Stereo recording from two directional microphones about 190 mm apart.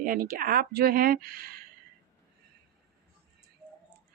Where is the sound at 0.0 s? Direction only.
50° right (ahead or behind).